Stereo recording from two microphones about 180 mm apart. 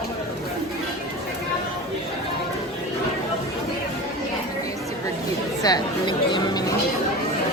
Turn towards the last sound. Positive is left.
turn(degrees=25)  # may be behind; listen again after turning